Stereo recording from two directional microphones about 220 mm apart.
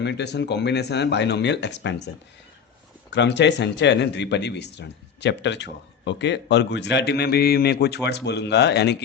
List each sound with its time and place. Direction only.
0.0 s speech: 50° left (ahead or behind)
3.2 s speech: 55° left (ahead or behind)